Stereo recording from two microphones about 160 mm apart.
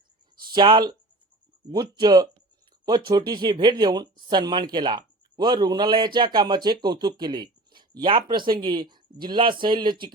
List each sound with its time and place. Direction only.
0.5 s speech: 30° right (ahead or behind)